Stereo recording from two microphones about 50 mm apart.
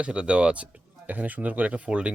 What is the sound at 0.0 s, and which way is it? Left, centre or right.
Speech, right.